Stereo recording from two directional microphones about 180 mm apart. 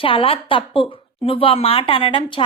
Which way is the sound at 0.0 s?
30° left (ahead or behind).